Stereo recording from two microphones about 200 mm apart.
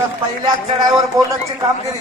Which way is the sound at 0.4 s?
20° right (ahead or behind).